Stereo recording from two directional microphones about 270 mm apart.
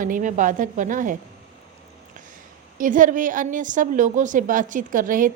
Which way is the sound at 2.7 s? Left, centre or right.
Right.